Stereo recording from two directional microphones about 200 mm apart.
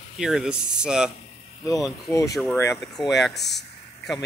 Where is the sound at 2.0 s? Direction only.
15° left (ahead or behind).